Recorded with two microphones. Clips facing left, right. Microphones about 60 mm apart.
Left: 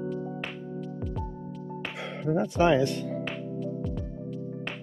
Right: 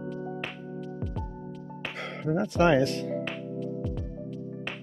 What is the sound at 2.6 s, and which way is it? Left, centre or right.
Speech, right.